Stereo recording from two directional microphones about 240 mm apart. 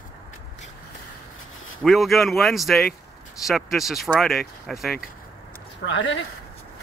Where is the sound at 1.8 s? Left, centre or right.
Centre.